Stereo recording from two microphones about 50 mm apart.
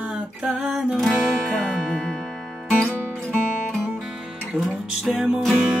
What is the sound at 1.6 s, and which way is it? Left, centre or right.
Music, centre.